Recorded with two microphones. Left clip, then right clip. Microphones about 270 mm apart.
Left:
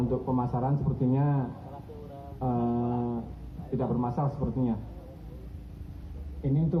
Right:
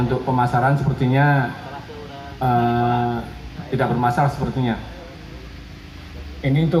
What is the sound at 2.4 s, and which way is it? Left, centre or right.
Speech, right.